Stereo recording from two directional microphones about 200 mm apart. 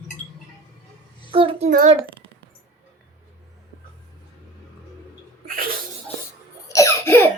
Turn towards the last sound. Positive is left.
turn(degrees=15)  # may be behind; listen again after turning